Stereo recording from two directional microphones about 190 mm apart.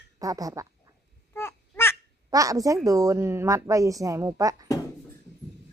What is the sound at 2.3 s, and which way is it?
Speech, 20° right (ahead or behind).